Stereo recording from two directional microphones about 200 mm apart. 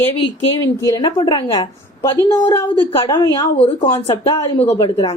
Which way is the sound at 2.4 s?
15° left (ahead or behind).